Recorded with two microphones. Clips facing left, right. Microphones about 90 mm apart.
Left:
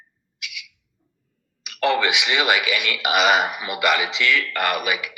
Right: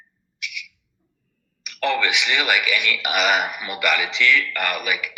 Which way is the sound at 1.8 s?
15° left (ahead or behind).